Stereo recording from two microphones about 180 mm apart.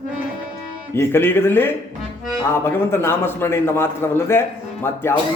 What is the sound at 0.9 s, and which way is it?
A man's voice, 15° left (ahead or behind).